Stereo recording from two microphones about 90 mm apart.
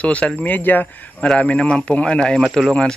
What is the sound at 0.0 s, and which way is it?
Speech, 15° left (ahead or behind).